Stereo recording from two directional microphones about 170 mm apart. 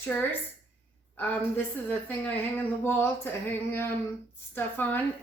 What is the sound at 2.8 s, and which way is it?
A woman's voice, 15° left (ahead or behind).